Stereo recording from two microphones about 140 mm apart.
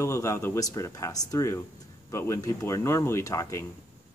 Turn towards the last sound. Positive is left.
turn(degrees=25)  # may be behind; listen again after turning